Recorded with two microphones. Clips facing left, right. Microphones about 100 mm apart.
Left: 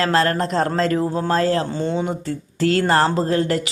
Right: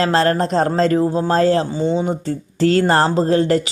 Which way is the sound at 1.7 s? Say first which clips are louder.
Right 4 dB; 10° right (ahead or behind).